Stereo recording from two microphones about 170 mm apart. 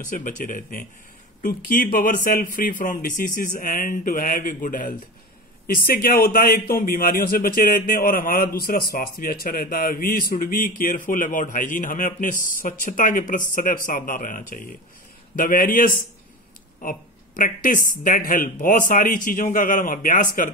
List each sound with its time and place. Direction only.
0.1 s speech: 50° left (ahead or behind)
6.0 s speech: 55° left (ahead or behind)